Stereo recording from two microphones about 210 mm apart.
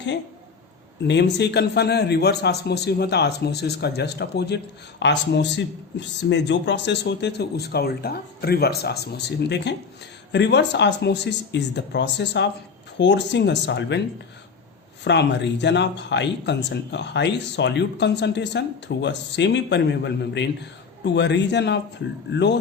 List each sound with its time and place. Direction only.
1.0 s a man's voice: 55° left (ahead or behind)
15.0 s speech: 55° left (ahead or behind)